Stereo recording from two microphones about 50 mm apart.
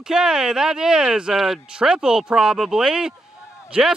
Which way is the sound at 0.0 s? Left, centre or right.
Centre.